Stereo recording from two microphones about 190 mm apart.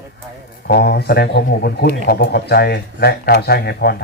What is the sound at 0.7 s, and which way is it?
Speech, 55° left (ahead or behind).